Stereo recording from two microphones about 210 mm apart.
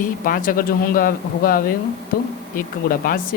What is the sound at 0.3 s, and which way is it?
Speech, 45° left (ahead or behind).